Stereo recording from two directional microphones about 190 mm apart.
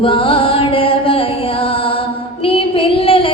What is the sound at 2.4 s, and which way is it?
Child singing, 30° left (ahead or behind).